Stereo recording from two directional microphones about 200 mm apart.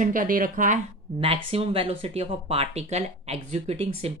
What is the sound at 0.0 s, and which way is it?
Speech, 45° right (ahead or behind).